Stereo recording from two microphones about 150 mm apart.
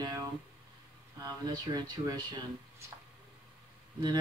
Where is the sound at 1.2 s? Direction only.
25° right (ahead or behind).